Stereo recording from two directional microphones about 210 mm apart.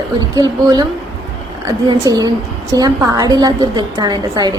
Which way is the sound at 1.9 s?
20° right (ahead or behind).